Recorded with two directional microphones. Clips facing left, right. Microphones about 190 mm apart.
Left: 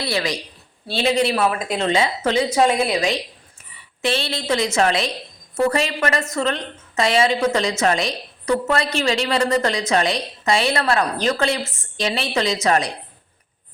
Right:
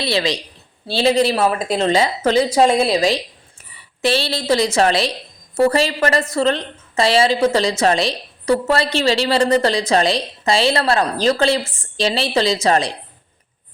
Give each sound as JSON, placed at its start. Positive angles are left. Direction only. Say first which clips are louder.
{"t": 0.0, "sound": "a woman's voice", "louder": "right 3 dB", "side_deg": -25}